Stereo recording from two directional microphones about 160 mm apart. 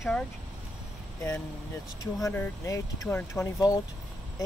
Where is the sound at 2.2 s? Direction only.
20° left (ahead or behind).